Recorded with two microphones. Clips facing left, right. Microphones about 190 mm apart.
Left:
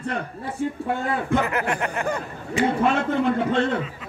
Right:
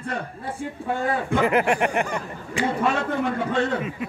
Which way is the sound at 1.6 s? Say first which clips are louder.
Right 4 dB; 15° right (ahead or behind).